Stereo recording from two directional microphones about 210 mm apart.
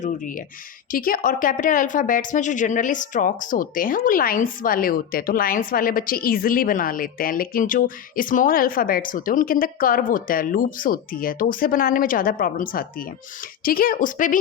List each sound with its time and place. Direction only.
0.9 s a woman's voice: 40° left (ahead or behind)